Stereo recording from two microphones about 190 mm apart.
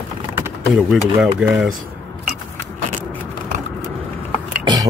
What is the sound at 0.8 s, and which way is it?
Speech, 5° right (ahead or behind).